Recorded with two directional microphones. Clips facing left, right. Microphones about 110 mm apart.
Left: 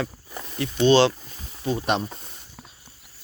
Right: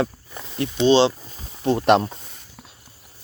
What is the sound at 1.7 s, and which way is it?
Speech, 80° right.